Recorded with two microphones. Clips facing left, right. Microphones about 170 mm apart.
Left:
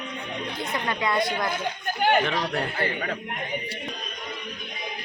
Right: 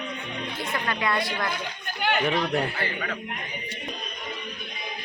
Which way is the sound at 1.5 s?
45° left (ahead or behind).